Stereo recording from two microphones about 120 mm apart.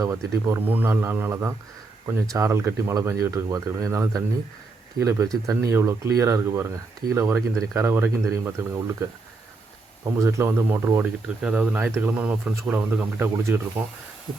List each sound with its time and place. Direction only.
0.0 s speech: 25° right (ahead or behind)
11.0 s speech: 10° right (ahead or behind)